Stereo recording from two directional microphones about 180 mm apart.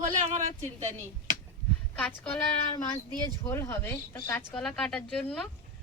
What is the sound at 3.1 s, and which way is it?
Speech, 15° left (ahead or behind).